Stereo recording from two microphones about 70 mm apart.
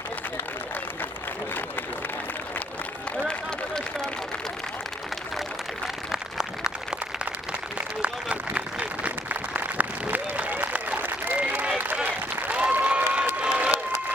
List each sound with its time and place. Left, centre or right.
6.1 s applause: centre
7.8 s applause: centre